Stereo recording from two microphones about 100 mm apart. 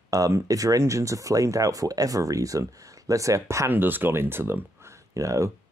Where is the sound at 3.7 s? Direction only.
20° right (ahead or behind).